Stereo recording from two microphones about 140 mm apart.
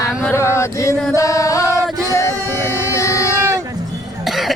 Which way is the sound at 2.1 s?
20° left (ahead or behind).